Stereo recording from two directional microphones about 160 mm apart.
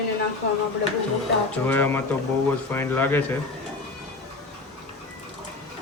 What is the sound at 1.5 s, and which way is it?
A man's voice, 10° left (ahead or behind).